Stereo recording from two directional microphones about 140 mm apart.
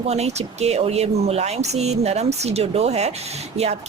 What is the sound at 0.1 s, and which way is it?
Speech, 50° right (ahead or behind).